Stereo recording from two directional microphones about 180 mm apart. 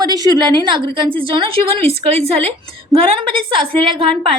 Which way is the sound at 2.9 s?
30° right (ahead or behind).